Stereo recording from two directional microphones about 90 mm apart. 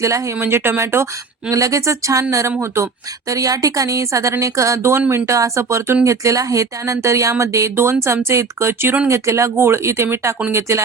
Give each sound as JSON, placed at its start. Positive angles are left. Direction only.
{"t": 0.0, "sound": "speech", "side_deg": -35}
{"t": 4.8, "sound": "speech", "side_deg": -25}